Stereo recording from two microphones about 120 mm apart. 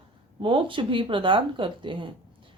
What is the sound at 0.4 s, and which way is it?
Speech, 45° right (ahead or behind).